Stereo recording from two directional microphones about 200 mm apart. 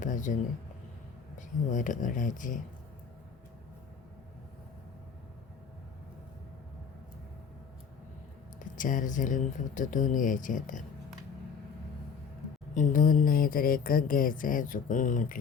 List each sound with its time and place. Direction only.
0.0 s speech: 40° left (ahead or behind)
1.4 s speech: 40° left (ahead or behind)
8.5 s speech: 40° left (ahead or behind)
12.7 s a sound: 40° left (ahead or behind)